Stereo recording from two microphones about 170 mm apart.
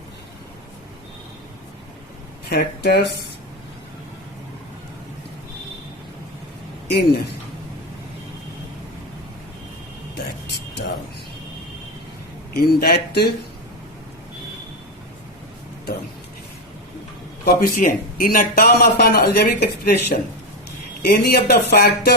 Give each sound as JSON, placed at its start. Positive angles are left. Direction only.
{"t": 2.5, "sound": "speech", "side_deg": 70}
{"t": 6.8, "sound": "speech", "side_deg": 70}
{"t": 10.4, "sound": "a sound", "side_deg": 85}
{"t": 12.5, "sound": "speech", "side_deg": 70}
{"t": 17.4, "sound": "a man's voice", "side_deg": 65}